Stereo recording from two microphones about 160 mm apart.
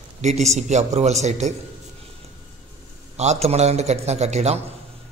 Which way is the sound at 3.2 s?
40° right (ahead or behind).